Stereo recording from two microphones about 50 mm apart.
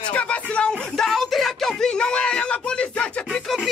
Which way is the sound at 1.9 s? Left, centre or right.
Centre.